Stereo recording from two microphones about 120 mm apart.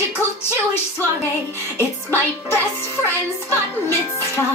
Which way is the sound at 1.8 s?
20° left (ahead or behind).